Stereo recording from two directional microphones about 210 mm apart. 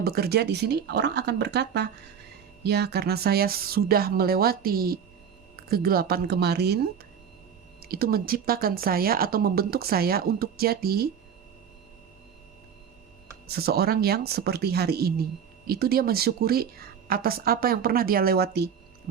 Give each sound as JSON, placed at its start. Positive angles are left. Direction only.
{"t": 0.0, "sound": "speech", "side_deg": -50}
{"t": 7.8, "sound": "speech", "side_deg": -45}
{"t": 13.5, "sound": "speech", "side_deg": -45}